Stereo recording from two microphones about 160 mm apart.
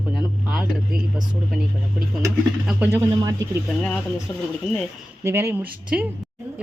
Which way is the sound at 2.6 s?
10° right (ahead or behind).